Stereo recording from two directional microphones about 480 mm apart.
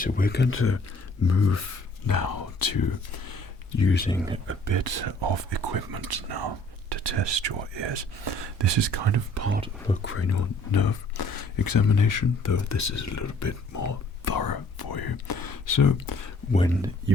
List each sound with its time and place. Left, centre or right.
0.0 s speech: centre
2.0 s speech: left
3.8 s speech: centre
4.6 s speech: right
9.3 s speech: right
9.8 s speech: centre
10.7 s speech: left
16.5 s speech: centre